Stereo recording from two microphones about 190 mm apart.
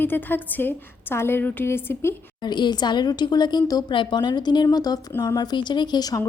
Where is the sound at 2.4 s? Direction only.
25° left (ahead or behind).